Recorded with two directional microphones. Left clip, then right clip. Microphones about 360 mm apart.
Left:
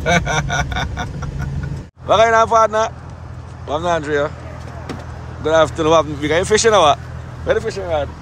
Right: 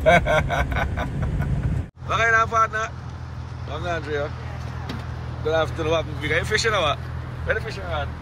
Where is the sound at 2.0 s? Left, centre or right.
Centre.